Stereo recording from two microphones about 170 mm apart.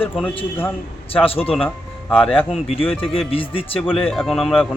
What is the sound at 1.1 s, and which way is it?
Speech, 35° left (ahead or behind).